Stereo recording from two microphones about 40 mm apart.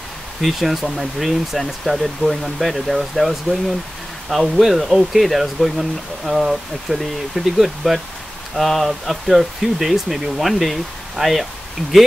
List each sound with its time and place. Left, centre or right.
0.4 s speech: centre